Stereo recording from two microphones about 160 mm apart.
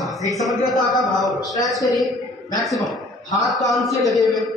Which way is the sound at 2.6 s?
Centre (ahead or behind).